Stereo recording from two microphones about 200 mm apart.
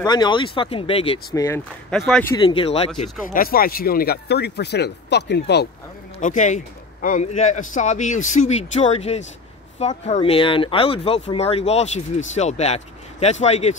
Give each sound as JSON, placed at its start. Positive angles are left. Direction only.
{"t": 0.0, "sound": "speech", "side_deg": 20}
{"t": 1.3, "sound": "speech", "side_deg": 15}
{"t": 2.0, "sound": "speech", "side_deg": 5}
{"t": 2.3, "sound": "speech", "side_deg": 25}
{"t": 3.3, "sound": "speech", "side_deg": 45}
{"t": 6.1, "sound": "a man's voice", "side_deg": 40}